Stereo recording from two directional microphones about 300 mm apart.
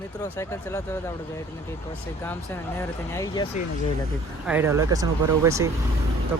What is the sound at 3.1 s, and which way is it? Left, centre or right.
Speech, centre.